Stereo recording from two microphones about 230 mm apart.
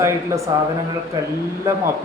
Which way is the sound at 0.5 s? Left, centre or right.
Centre.